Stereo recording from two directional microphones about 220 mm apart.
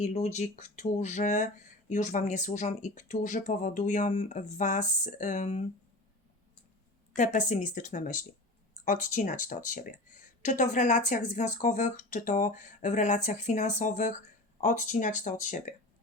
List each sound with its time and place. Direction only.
0.0 s speech: 30° left (ahead or behind)
7.2 s speech: 35° left (ahead or behind)